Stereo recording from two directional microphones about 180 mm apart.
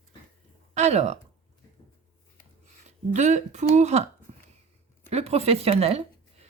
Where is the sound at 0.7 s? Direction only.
40° right (ahead or behind).